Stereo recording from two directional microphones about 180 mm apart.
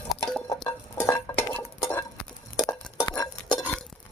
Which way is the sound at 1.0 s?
15° left (ahead or behind).